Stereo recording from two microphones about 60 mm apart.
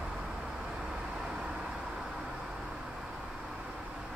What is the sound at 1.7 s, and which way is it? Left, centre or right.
Vehicle, centre.